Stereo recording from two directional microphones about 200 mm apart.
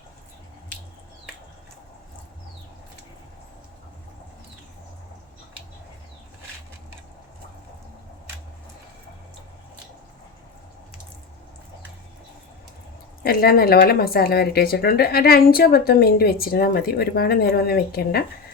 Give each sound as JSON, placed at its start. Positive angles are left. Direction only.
{"t": 13.2, "sound": "speech", "side_deg": 50}